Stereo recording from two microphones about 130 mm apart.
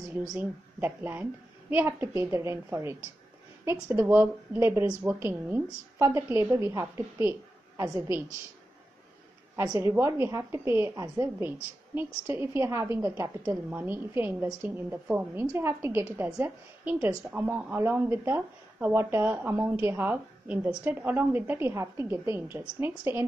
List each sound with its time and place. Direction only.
0.7 s a woman's voice: 15° right (ahead or behind)
9.6 s a woman's voice: 20° right (ahead or behind)